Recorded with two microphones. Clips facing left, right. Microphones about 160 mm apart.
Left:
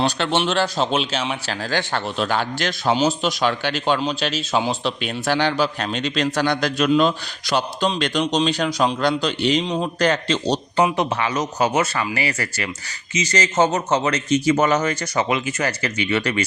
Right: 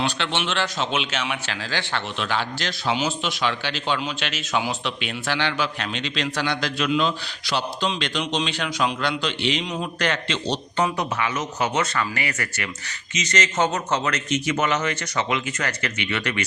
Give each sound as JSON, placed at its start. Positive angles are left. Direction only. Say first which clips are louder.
{"t": 0.0, "sound": "a man's voice", "louder": "left 5 dB", "side_deg": 40}
{"t": 2.9, "sound": "a man's voice", "louder": "left 6 dB", "side_deg": 40}